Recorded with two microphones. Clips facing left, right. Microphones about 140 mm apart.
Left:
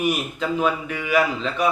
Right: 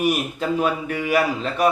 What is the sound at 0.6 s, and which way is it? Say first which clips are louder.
A man's voice: right 1 dB; 45° right (ahead or behind).